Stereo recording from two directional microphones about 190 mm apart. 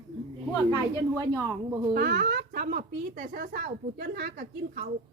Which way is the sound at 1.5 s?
20° right (ahead or behind).